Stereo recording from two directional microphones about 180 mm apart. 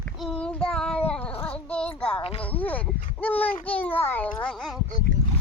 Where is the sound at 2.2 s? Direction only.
30° left (ahead or behind).